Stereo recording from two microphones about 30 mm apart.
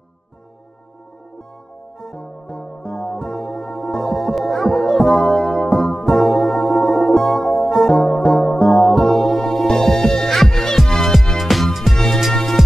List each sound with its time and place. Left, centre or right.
2.0 s music: centre